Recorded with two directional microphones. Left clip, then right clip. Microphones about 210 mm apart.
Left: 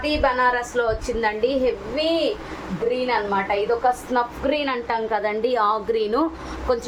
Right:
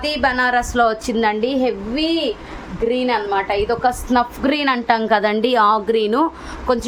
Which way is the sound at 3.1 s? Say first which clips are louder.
Right 3 dB; 55° right (ahead or behind).